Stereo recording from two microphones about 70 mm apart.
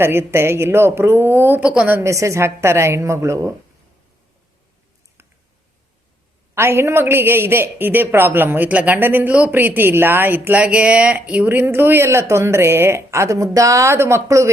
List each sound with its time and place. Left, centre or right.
0.0 s a man's voice: right
1.6 s a woman's voice: centre
2.0 s a woman's voice: right
6.5 s a man's voice: right; by 11.4 s centre
11.4 s a man's voice: right